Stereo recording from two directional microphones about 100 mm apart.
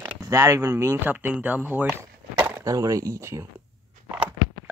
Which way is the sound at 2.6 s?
35° right (ahead or behind).